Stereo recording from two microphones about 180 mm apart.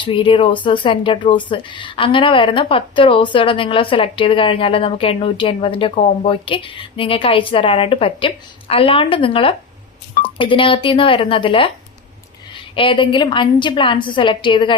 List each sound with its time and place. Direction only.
0.0 s speech: 30° left (ahead or behind)
12.7 s speech: 30° left (ahead or behind)